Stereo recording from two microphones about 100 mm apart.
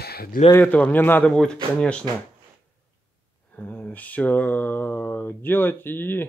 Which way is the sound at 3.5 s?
15° left (ahead or behind).